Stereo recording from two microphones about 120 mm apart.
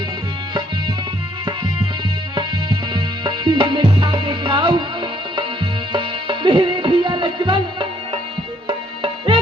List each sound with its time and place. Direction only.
2.3 s music: 40° right (ahead or behind)
5.9 s music: 40° right (ahead or behind)